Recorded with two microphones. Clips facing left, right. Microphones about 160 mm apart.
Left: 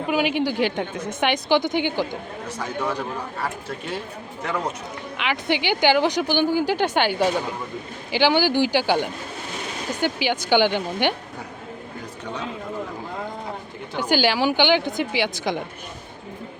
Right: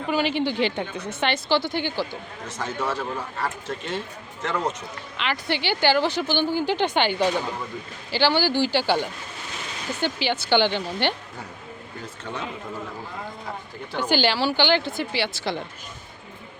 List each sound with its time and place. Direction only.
0.1 s speech: 10° left (ahead or behind)
13.9 s speech: 10° left (ahead or behind)